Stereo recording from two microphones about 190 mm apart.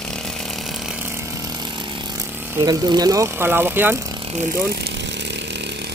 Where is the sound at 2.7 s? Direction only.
20° right (ahead or behind).